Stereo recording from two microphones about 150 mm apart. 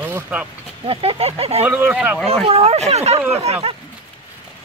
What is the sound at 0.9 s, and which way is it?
Speech, 40° right (ahead or behind).